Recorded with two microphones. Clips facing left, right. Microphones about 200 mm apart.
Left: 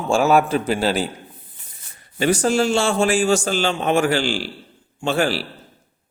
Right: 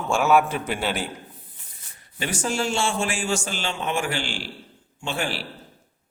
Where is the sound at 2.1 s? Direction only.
35° left (ahead or behind).